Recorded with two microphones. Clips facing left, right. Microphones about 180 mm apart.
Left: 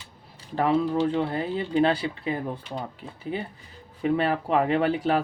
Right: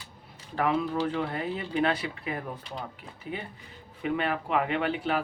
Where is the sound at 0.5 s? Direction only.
30° left (ahead or behind).